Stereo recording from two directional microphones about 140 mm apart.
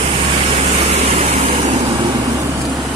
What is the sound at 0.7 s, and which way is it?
Vehicle, 50° right (ahead or behind).